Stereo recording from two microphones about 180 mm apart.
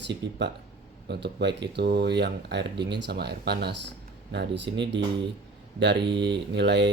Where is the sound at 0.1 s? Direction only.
75° right (ahead or behind).